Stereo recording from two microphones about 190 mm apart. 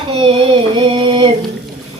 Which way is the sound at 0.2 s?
30° right (ahead or behind).